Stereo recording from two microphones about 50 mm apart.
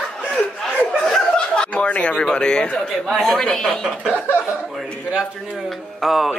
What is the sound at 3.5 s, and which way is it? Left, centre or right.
Speech, centre.